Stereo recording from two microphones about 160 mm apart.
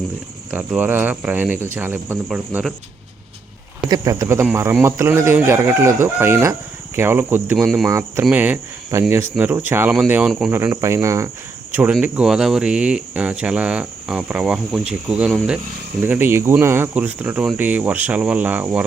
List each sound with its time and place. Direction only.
0.5 s speech: 10° right (ahead or behind)
3.8 s speech: 25° right (ahead or behind); by 7.9 s 5° right (ahead or behind)
7.9 s speech: 20° right (ahead or behind)
11.7 s speech: 10° right (ahead or behind)